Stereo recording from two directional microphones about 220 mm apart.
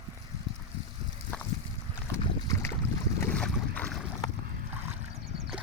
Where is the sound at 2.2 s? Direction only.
15° left (ahead or behind).